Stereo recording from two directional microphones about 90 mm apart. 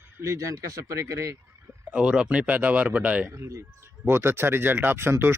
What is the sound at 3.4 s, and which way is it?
Speech, 30° right (ahead or behind).